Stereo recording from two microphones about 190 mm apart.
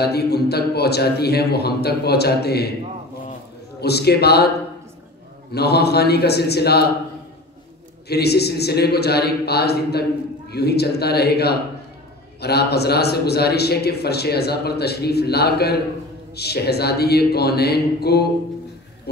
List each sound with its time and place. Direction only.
0.0 s a man's voice: 55° left (ahead or behind)
3.8 s a man's voice: 60° left (ahead or behind)
5.5 s a man's voice: 60° left (ahead or behind)
8.1 s a man's voice: 60° left (ahead or behind)